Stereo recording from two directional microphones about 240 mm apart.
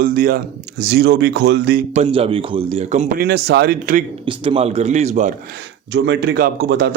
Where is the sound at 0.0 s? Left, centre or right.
Right.